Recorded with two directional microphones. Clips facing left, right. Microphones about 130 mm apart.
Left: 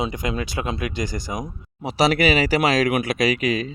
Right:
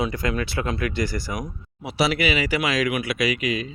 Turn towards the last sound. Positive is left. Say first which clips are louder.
# left 3 dB
turn(degrees=40)  # may be behind; listen again after turning